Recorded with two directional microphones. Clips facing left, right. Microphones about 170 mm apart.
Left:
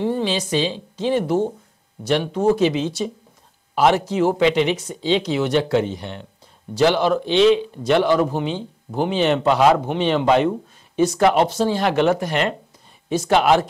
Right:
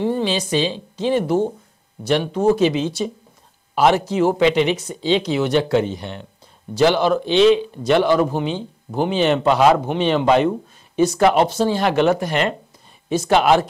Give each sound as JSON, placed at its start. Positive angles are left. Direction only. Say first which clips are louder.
{"t": 0.0, "sound": "speech", "louder": "right 1 dB", "side_deg": -10}